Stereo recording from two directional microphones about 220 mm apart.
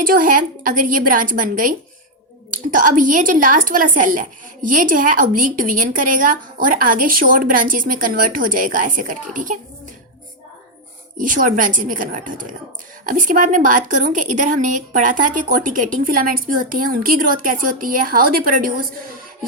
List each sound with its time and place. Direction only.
0.0 s a woman's voice: 40° right (ahead or behind)
2.7 s a woman's voice: 35° right (ahead or behind)
11.2 s a woman's voice: 35° right (ahead or behind)